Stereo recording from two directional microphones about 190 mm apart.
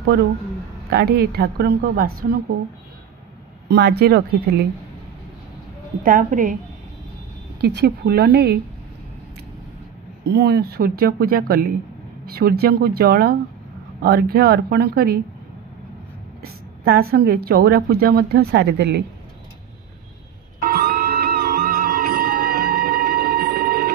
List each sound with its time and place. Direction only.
0.8 s speech: 55° right (ahead or behind)
3.6 s speech: 60° right (ahead or behind)
6.0 s speech: 45° right (ahead or behind)
7.6 s speech: 60° right (ahead or behind)
10.2 s speech: 60° right (ahead or behind)
16.4 s speech: 55° right (ahead or behind)
20.6 s music: 50° right (ahead or behind)